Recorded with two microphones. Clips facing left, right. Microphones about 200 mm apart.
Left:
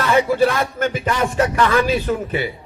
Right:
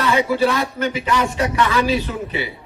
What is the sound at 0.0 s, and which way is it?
A man's voice, 50° left (ahead or behind).